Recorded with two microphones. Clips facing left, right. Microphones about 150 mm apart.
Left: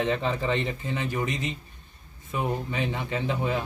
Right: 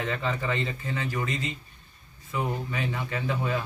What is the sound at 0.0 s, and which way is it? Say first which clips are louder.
Speech: left 4 dB; 20° left (ahead or behind).